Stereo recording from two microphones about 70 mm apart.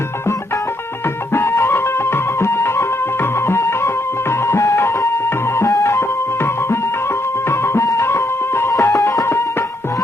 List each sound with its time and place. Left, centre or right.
1.3 s music: left